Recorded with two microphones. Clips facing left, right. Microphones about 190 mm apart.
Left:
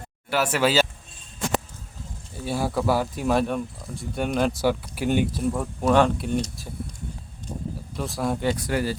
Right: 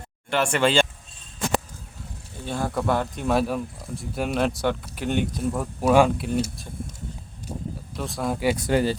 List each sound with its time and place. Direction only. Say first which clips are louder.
0.3 s speech: right 1 dB; 5° left (ahead or behind)
2.4 s speech: left 2 dB; 10° left (ahead or behind)
7.9 s speech: left 1 dB; centre (ahead or behind)
8.5 s speech: right 4 dB; 25° right (ahead or behind)